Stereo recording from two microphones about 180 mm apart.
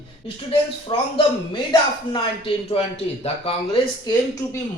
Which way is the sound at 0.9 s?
25° left (ahead or behind).